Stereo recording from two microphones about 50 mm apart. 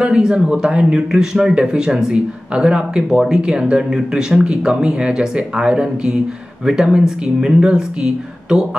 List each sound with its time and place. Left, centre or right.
0.0 s a man's voice: centre